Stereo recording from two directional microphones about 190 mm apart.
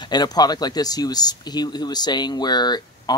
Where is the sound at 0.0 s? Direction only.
20° left (ahead or behind).